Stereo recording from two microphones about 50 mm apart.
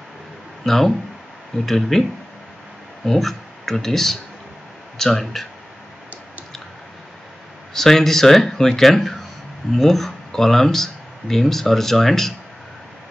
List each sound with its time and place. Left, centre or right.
0.7 s speech: centre
3.1 s speech: centre
7.7 s speech: centre